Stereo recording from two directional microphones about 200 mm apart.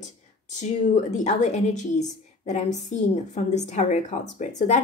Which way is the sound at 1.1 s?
35° left (ahead or behind).